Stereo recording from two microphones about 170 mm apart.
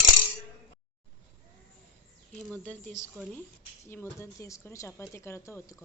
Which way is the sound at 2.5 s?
10° left (ahead or behind).